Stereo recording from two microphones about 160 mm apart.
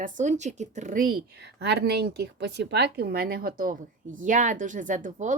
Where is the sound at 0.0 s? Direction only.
50° right (ahead or behind).